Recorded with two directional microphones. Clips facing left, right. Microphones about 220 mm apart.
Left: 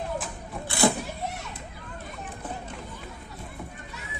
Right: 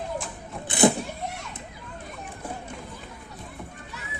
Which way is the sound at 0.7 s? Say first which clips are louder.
Right 3 dB; 20° right (ahead or behind).